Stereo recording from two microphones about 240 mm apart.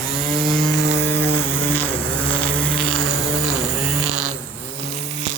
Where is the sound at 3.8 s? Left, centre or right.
Right.